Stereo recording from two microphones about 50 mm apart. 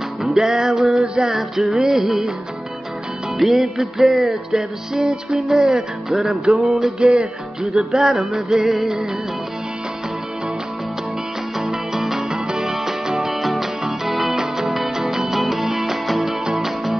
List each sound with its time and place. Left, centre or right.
0.2 s music: centre
1.0 s music: centre
1.3 s music: centre
3.3 s music: centre
11.6 s music: centre